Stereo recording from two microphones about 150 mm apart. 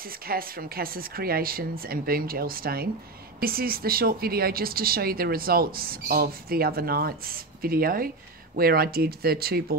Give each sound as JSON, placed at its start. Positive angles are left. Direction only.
{"t": 0.0, "sound": "speech", "side_deg": -75}
{"t": 8.5, "sound": "speech", "side_deg": -90}